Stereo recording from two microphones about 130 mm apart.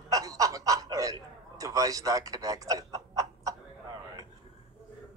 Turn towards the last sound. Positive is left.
turn(degrees=-25)  # may be behind; listen again after turning